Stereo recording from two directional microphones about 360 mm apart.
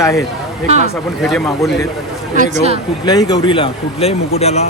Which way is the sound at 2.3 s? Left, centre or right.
Right.